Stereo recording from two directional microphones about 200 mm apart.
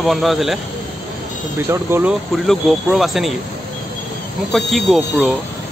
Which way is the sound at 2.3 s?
Centre (ahead or behind).